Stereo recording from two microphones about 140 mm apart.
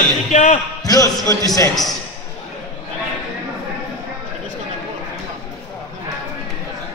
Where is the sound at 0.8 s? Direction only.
25° left (ahead or behind).